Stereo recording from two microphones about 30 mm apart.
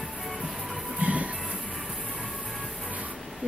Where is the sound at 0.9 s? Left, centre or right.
Right.